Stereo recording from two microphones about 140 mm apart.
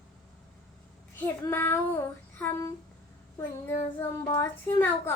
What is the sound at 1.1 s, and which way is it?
Child singing, 15° left (ahead or behind).